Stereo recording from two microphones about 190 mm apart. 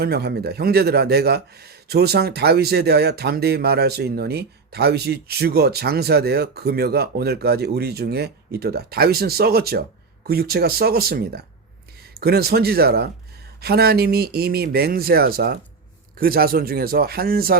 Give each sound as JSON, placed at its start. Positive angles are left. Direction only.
{"t": 0.0, "sound": "speech", "side_deg": -60}